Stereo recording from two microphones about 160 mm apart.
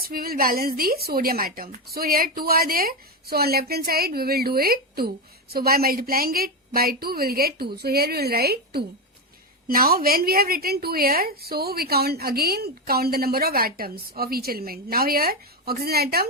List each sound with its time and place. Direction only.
0.0 s a woman's voice: 65° right (ahead or behind)